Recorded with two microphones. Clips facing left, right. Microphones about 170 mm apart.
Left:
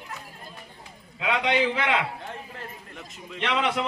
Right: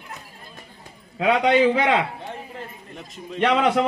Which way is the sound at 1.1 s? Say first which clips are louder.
Right 7 dB; 40° right (ahead or behind).